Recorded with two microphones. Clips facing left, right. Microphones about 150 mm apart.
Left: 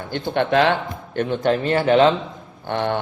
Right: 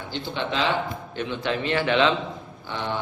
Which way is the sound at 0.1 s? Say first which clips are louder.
Left 9 dB; 55° left (ahead or behind).